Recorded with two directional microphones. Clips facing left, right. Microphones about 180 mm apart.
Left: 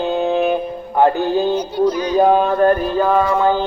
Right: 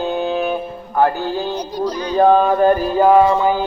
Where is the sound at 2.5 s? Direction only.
5° right (ahead or behind).